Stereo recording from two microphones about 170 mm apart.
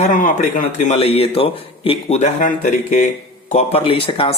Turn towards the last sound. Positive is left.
turn(degrees=35)  # may be behind; listen again after turning